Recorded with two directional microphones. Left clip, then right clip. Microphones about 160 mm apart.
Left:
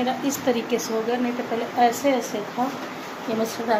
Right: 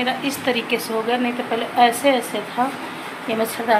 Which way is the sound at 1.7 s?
10° right (ahead or behind).